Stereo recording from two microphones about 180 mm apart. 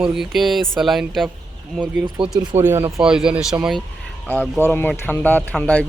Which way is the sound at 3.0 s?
5° right (ahead or behind).